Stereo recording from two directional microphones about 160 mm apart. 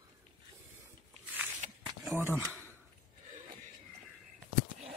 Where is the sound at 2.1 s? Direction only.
15° right (ahead or behind).